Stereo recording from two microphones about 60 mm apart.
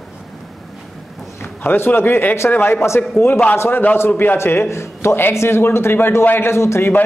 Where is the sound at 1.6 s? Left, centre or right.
Left.